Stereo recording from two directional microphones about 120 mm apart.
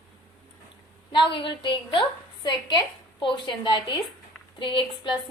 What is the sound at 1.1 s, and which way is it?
Speech, 40° left (ahead or behind).